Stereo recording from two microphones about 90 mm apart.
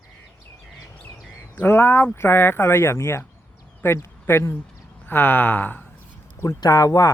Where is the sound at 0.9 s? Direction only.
15° left (ahead or behind).